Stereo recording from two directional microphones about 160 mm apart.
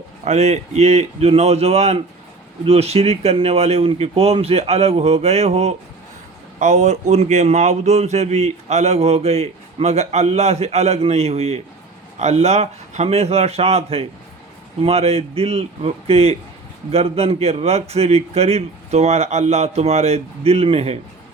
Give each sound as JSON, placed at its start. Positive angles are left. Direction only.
{"t": 0.3, "sound": "a man's voice", "side_deg": -45}